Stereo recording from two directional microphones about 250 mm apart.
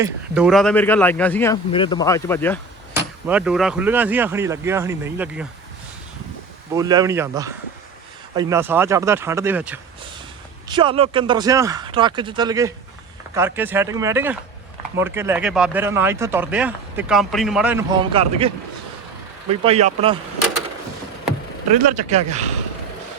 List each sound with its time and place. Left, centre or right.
0.0 s speech: centre
1.7 s speech: centre
3.2 s speech: centre
6.7 s speech: centre
10.7 s speech: centre
17.9 s speech: centre
21.8 s speech: right